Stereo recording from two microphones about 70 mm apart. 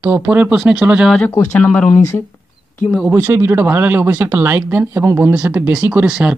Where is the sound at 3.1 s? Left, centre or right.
Right.